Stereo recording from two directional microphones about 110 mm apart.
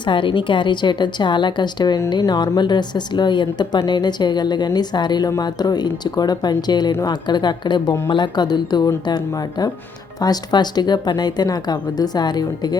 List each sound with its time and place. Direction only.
0.0 s a woman's voice: 50° left (ahead or behind)